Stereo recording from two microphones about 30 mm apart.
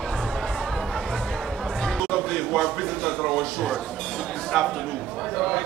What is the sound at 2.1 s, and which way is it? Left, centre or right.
Music, centre.